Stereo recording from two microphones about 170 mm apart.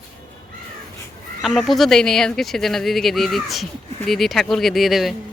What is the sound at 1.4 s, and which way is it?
Speech, centre (ahead or behind).